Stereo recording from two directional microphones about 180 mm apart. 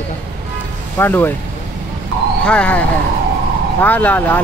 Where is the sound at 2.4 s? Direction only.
5° left (ahead or behind).